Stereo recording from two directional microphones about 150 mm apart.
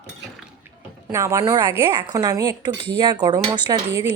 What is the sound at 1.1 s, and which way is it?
Speech, 20° right (ahead or behind).